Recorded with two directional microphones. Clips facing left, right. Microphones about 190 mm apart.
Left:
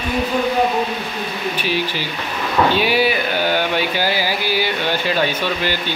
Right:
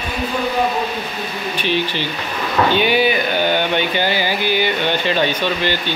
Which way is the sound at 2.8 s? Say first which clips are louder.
Right 1 dB; centre (ahead or behind).